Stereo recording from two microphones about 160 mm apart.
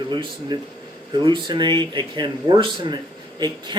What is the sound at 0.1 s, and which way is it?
Speech, 30° right (ahead or behind).